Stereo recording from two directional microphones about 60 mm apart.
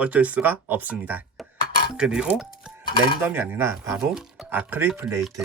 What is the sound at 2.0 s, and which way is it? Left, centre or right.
Speech, centre.